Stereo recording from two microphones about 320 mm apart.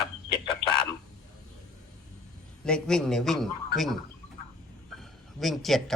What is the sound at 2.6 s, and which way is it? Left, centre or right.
A man's voice, centre.